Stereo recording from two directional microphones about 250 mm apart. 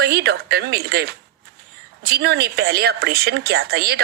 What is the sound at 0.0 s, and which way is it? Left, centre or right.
A woman's voice, right.